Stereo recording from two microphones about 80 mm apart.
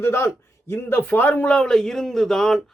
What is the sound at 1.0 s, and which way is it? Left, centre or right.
A man's voice, left.